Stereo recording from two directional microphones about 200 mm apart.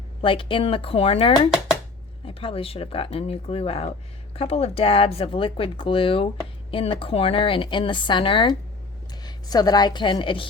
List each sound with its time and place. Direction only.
0.2 s a woman's voice: 25° left (ahead or behind)